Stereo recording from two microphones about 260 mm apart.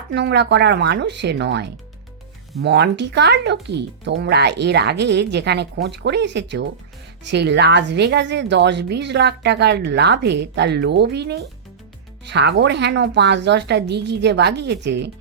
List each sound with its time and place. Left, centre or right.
0.1 s a woman's voice: right